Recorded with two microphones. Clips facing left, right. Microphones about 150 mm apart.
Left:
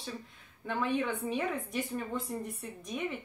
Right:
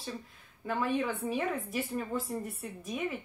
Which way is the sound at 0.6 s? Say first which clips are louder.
Right 1 dB; 5° right (ahead or behind).